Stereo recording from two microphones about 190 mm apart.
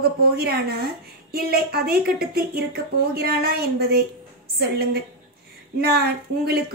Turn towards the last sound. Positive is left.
turn(degrees=-55)  # may be behind; listen again after turning